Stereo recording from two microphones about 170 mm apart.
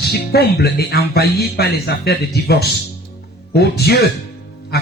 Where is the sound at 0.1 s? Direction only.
70° left (ahead or behind).